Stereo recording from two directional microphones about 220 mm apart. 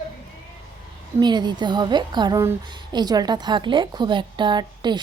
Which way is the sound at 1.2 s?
20° right (ahead or behind).